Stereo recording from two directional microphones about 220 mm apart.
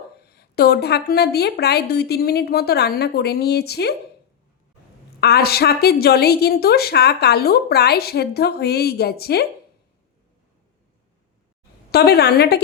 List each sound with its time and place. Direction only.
0.2 s a woman's voice: 45° left (ahead or behind)
5.2 s a woman's voice: 45° left (ahead or behind)
11.9 s a woman's voice: 45° left (ahead or behind)